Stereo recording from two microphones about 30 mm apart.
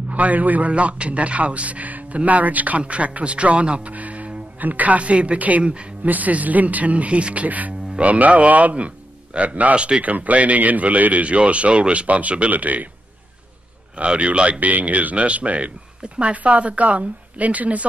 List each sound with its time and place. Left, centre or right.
0.1 s speech: right
0.7 s speech: right
2.8 s a man's voice: right
3.9 s a man's voice: right
6.0 s speech: right
7.4 s a man's voice: right
9.8 s a man's voice: right
10.0 s speech: right
12.1 s speech: right
12.5 s speech: right
13.9 s a man's voice: right
14.6 s speech: right